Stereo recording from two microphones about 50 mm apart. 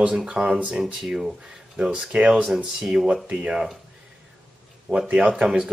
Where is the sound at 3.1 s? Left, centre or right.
Right.